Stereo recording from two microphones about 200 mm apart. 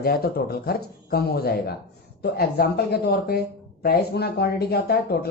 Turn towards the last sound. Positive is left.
turn(degrees=50)  # may be behind; listen again after turning